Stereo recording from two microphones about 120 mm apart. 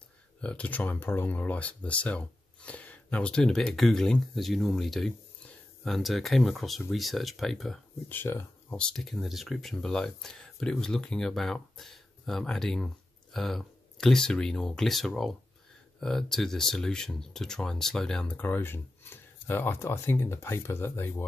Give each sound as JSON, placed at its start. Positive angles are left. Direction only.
{"t": 0.4, "sound": "speech", "side_deg": 10}
{"t": 8.1, "sound": "speech", "side_deg": 15}
{"t": 8.8, "sound": "speech", "side_deg": 5}